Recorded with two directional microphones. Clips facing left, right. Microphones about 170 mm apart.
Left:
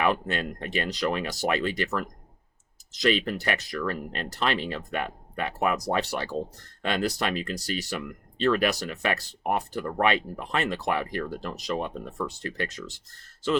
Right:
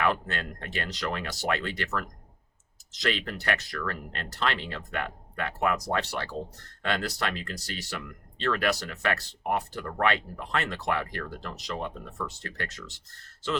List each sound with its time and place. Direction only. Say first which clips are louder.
0.0 s speech: left 3 dB; 15° left (ahead or behind)